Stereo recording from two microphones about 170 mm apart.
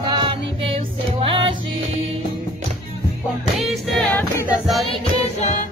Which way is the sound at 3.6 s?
5° left (ahead or behind).